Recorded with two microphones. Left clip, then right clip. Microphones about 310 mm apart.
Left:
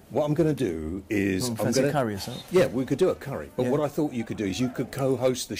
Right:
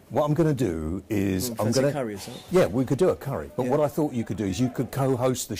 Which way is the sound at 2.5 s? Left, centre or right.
Right.